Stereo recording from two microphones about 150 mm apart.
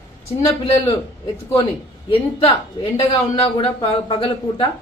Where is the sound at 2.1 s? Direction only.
40° left (ahead or behind).